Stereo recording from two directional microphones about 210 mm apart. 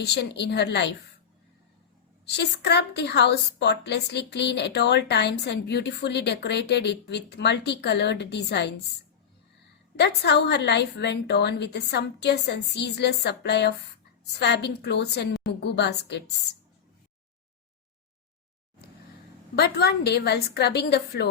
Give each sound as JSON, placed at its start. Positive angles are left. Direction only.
{"t": 0.0, "sound": "a woman's voice", "side_deg": 50}
{"t": 2.2, "sound": "a woman's voice", "side_deg": 55}
{"t": 10.0, "sound": "a woman's voice", "side_deg": 55}
{"t": 19.5, "sound": "a woman's voice", "side_deg": 50}